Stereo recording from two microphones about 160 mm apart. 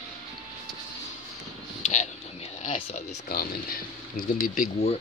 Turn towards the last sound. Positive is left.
turn(degrees=60)  # may be behind; listen again after turning